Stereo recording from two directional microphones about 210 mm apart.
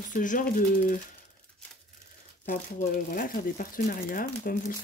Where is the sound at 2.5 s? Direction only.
40° left (ahead or behind).